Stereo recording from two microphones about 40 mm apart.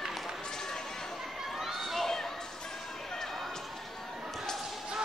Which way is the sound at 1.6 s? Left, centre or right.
Centre.